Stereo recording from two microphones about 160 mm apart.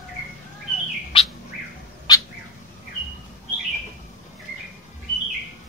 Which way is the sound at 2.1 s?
25° left (ahead or behind).